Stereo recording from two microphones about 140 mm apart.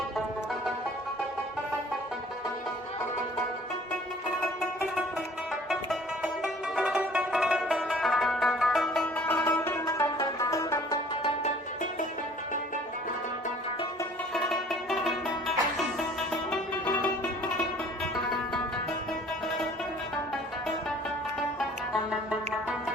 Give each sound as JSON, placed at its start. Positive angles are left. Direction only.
{"t": 5.6, "sound": "music", "side_deg": 0}
{"t": 11.4, "sound": "music", "side_deg": 60}
{"t": 14.3, "sound": "music", "side_deg": 5}
{"t": 21.6, "sound": "music", "side_deg": -5}